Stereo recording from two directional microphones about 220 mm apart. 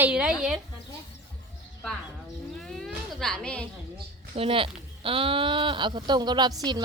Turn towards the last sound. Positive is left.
turn(degrees=-20)  # may be behind; listen again after turning